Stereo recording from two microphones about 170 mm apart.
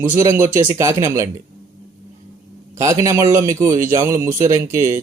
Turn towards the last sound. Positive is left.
turn(degrees=-15)  # may be behind; listen again after turning